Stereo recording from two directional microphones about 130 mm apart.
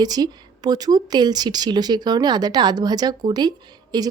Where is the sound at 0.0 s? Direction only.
30° right (ahead or behind).